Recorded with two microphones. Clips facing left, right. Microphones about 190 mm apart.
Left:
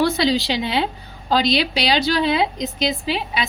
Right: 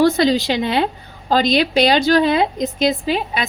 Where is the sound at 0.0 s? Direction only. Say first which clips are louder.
Right 4 dB; 50° right (ahead or behind).